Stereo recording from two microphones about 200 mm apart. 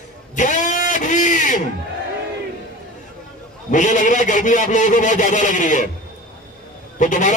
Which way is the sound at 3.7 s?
40° left (ahead or behind).